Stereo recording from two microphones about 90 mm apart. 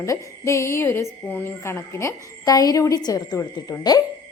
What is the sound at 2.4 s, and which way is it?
A woman's voice, 45° left (ahead or behind).